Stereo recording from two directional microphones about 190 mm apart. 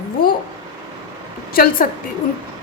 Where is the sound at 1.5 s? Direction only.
50° left (ahead or behind).